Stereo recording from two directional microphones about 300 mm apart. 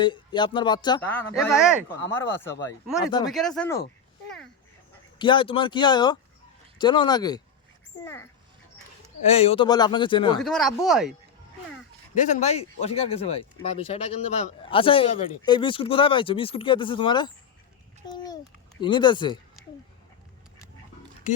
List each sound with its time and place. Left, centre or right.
0.0 s speech: centre
1.4 s speech: centre
2.1 s speech: centre
5.2 s speech: centre
9.2 s speech: left
10.4 s speech: centre
12.1 s speech: left
18.8 s speech: centre